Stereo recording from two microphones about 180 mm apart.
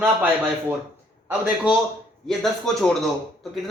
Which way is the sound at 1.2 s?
5° right (ahead or behind).